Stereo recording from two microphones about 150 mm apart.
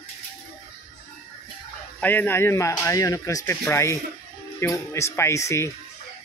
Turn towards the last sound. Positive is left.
turn(degrees=20)  # may be behind; listen again after turning